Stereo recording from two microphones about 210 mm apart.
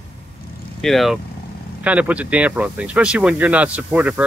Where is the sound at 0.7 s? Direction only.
Centre (ahead or behind).